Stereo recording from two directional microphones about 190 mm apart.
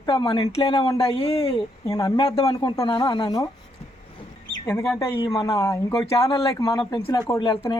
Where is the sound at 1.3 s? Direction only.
20° left (ahead or behind).